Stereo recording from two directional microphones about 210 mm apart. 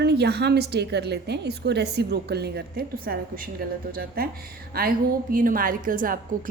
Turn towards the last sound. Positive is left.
turn(degrees=-40)  # may be behind; listen again after turning